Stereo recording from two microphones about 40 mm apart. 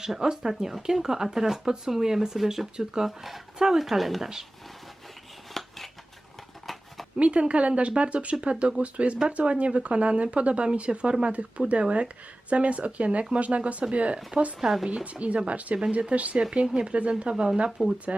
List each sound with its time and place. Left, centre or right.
0.0 s speech: centre
2.7 s speech: centre
3.2 s speech: centre
5.5 s scissors: centre
7.2 s speech: right
14.6 s speech: centre
15.0 s speech: right
16.4 s speech: right
17.8 s speech: centre